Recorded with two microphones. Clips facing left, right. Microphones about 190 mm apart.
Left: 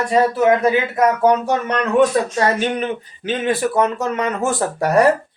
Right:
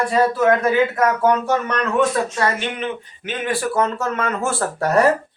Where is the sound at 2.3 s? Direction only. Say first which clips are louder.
Left 4 dB; 35° left (ahead or behind).